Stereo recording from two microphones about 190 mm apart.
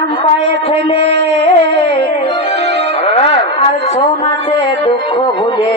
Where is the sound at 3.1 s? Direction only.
30° left (ahead or behind).